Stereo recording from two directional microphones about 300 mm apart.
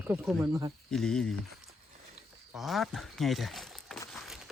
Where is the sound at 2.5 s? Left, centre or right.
Centre.